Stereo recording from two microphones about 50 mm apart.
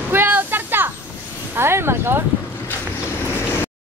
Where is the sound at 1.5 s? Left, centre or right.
Right.